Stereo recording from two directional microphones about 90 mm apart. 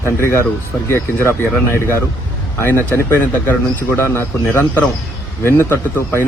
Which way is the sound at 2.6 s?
20° left (ahead or behind).